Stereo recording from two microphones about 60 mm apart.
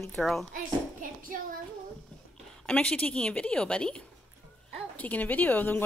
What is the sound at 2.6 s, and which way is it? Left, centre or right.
A woman's voice, left.